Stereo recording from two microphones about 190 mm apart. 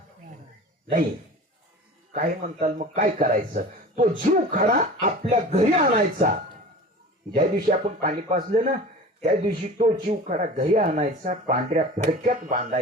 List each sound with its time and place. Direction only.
2.1 s speech: 45° right (ahead or behind)
7.3 s speech: 45° right (ahead or behind)